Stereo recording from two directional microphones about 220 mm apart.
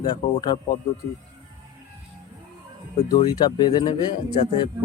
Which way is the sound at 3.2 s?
20° left (ahead or behind).